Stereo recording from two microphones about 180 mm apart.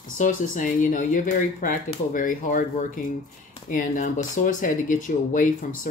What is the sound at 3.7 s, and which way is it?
Speech, 45° left (ahead or behind).